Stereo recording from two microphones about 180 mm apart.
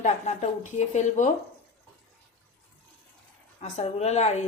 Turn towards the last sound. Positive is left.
turn(degrees=40)  # may be behind; listen again after turning